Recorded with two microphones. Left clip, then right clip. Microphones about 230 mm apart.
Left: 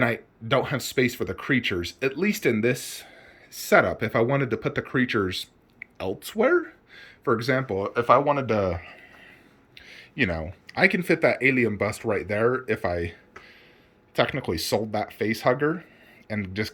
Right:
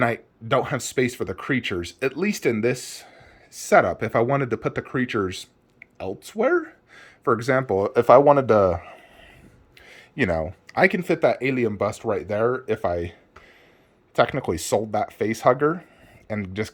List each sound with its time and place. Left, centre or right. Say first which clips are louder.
0.0 s speech: right 2 dB; centre
7.8 s speech: right 6 dB; right; by 13.1 s centre
14.2 s speech: right 3 dB; centre